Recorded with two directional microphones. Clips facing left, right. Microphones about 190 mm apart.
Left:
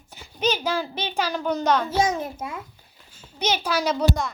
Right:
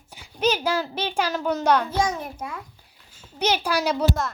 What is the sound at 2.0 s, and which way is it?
Speech, 25° left (ahead or behind).